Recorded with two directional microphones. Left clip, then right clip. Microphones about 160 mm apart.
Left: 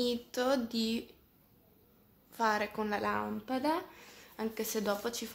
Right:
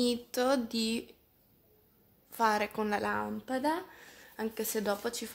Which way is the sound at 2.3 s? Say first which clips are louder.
Right 2 dB; 35° right (ahead or behind).